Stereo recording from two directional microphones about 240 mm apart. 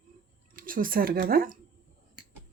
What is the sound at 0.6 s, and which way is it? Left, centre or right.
Speech, right.